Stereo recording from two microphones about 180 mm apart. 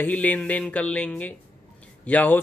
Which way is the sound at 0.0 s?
10° left (ahead or behind).